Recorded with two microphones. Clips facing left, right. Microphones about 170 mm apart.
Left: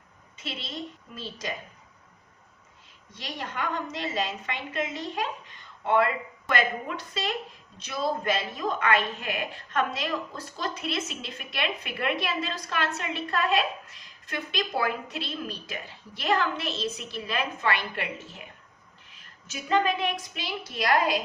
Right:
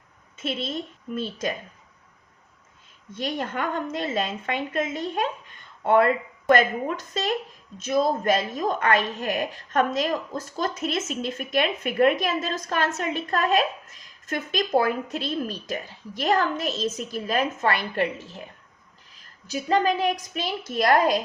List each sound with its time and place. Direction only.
0.3 s a woman's voice: 50° right (ahead or behind)
3.1 s a woman's voice: 50° right (ahead or behind)